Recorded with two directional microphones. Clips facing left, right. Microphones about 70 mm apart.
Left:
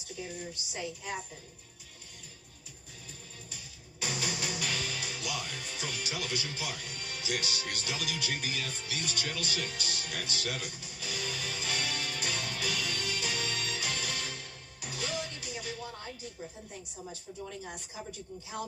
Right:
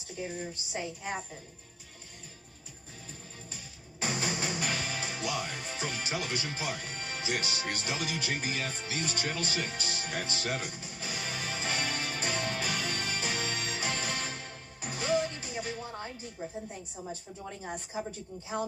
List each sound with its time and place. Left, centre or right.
0.5 s a woman's voice: right
4.0 s music: right
16.4 s a woman's voice: right
17.9 s a woman's voice: right